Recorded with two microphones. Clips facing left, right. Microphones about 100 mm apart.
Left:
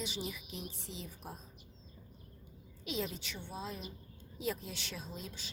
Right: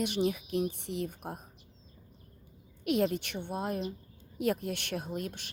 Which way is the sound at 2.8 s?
60° right (ahead or behind).